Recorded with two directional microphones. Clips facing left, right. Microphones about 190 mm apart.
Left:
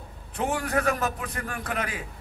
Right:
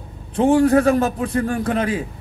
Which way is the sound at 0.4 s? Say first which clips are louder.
Right 13 dB; 30° right (ahead or behind).